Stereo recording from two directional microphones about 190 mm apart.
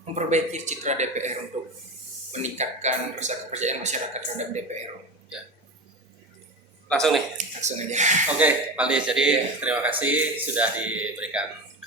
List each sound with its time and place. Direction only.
0.0 s speech: 35° right (ahead or behind)
6.8 s speech: 5° left (ahead or behind)
7.3 s speech: 40° right (ahead or behind)
8.4 s speech: 5° right (ahead or behind)